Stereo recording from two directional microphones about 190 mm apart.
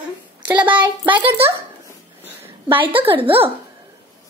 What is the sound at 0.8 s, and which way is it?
Speech, 25° right (ahead or behind).